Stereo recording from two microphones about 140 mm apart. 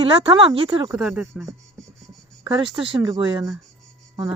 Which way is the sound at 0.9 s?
Centre (ahead or behind).